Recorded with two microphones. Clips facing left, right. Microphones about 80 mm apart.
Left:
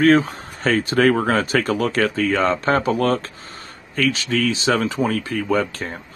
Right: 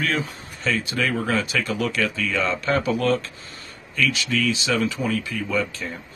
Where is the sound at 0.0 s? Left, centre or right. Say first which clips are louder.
Left 11 dB; left.